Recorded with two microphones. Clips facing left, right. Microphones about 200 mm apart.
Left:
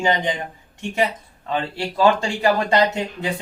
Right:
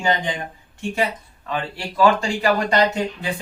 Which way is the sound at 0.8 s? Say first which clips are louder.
Left 1 dB; 20° left (ahead or behind).